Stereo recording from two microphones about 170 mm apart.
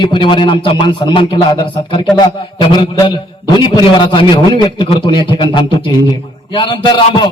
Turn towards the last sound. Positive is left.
turn(degrees=25)  # may be behind; listen again after turning